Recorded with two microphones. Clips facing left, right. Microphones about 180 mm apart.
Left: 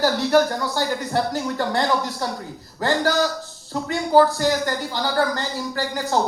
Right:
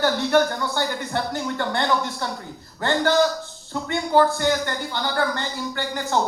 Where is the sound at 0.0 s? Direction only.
35° left (ahead or behind).